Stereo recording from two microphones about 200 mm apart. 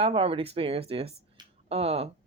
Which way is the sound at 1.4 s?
20° right (ahead or behind).